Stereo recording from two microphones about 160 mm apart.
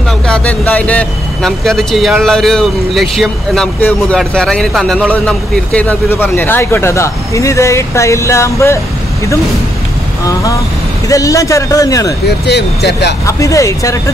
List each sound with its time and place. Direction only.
0.3 s speech: 10° left (ahead or behind)
10.2 s a man's voice: 20° left (ahead or behind)
12.3 s speech: 90° left
13.4 s a man's voice: 20° left (ahead or behind)